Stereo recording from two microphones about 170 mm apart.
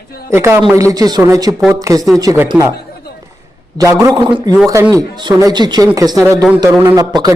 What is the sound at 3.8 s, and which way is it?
Speech, 20° right (ahead or behind).